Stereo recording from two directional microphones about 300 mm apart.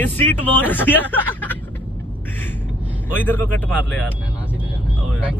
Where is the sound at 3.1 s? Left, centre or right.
Centre.